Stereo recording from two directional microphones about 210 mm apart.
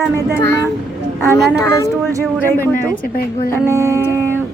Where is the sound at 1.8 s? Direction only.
15° right (ahead or behind).